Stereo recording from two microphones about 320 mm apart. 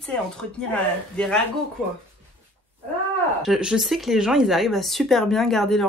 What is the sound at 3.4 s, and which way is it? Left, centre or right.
Speech, centre.